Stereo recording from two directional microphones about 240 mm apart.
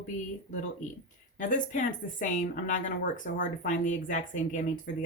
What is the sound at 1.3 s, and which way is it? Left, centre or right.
Speech, left.